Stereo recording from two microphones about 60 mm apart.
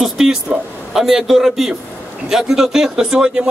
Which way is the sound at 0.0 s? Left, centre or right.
Centre.